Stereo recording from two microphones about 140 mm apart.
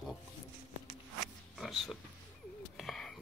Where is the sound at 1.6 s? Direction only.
Centre (ahead or behind).